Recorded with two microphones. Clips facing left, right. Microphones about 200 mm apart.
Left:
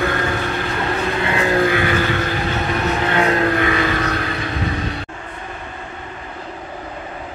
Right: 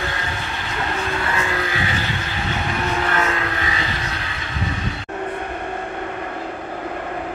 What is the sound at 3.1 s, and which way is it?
Vehicle, 35° left (ahead or behind).